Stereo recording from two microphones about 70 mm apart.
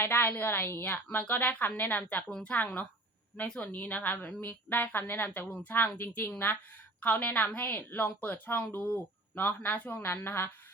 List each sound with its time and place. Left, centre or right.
0.0 s a woman's voice: left
3.4 s a woman's voice: centre
3.7 s a woman's voice: left